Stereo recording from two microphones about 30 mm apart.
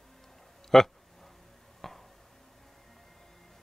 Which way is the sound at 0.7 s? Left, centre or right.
Centre.